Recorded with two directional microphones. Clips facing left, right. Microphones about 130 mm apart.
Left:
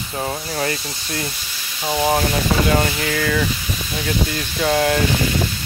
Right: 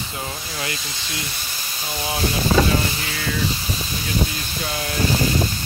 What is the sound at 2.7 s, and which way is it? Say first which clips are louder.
Speech: left 5 dB; 60° left (ahead or behind).